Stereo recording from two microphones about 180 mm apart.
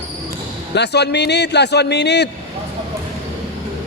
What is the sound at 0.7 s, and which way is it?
A man's voice, 70° left (ahead or behind).